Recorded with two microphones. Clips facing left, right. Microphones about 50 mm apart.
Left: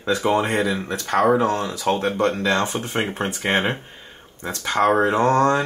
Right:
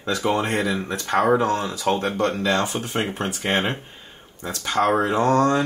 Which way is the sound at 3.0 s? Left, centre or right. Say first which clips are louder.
Left 1 dB; centre.